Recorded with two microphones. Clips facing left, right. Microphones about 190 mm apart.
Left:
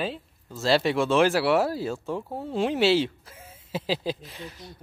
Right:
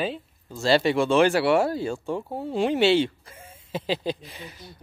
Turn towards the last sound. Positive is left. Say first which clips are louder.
# left 1 dB
turn(degrees=0)  # may be behind; listen again after turning